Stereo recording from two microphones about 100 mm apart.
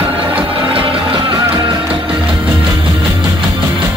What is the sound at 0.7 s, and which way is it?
Music, 60° right (ahead or behind).